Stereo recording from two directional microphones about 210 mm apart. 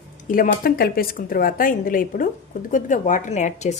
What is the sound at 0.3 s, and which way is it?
Speech, 40° left (ahead or behind).